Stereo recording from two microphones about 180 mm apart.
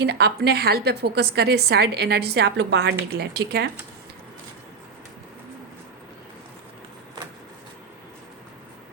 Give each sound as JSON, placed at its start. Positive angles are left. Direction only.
{"t": 0.0, "sound": "a woman's voice", "side_deg": -65}